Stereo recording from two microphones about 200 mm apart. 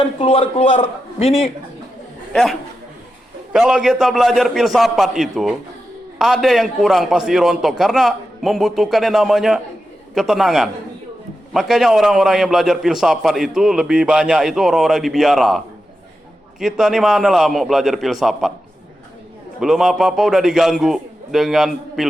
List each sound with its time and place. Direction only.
0.0 s a man's voice: 25° left (ahead or behind)
2.3 s a man's voice: centre (ahead or behind)
19.5 s a man's voice: centre (ahead or behind)